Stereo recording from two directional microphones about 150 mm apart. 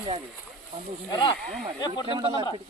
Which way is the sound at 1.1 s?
30° left (ahead or behind).